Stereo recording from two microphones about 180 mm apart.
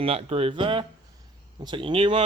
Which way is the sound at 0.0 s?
30° right (ahead or behind).